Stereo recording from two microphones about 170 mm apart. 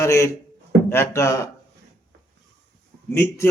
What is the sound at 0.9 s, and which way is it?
Speech, 15° left (ahead or behind).